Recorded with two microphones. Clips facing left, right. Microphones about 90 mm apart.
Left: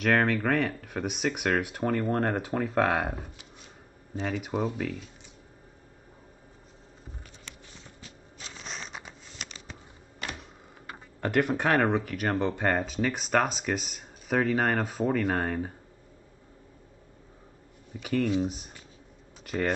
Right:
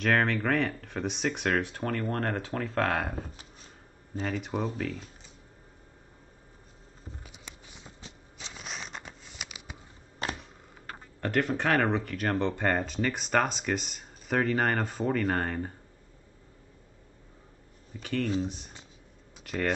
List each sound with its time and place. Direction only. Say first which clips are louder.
0.0 s speech: left 2 dB; centre (ahead or behind)
4.2 s speech: left 2 dB; 5° left (ahead or behind)
7.4 s walk: even; 15° right (ahead or behind)
8.5 s a sound: even; centre (ahead or behind)
10.2 s a sound: right 3 dB; 35° right (ahead or behind)
10.9 s speech: left 2 dB; 10° left (ahead or behind)
18.0 s speech: left 3 dB; 5° left (ahead or behind)
19.4 s typing: left 1 dB; 5° left (ahead or behind)